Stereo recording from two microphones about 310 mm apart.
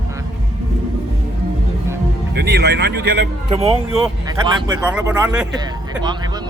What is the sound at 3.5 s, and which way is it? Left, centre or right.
Speech, centre.